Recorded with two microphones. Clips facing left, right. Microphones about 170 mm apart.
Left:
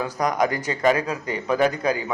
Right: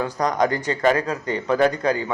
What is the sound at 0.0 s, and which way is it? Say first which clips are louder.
Speech: right 1 dB; 10° left (ahead or behind).